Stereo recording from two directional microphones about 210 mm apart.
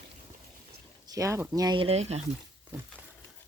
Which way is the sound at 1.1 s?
15° right (ahead or behind).